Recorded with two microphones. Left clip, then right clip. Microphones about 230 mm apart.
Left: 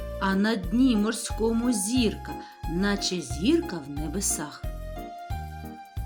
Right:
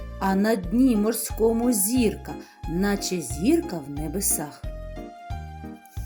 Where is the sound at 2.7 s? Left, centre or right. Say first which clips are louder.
Right 1 dB; centre.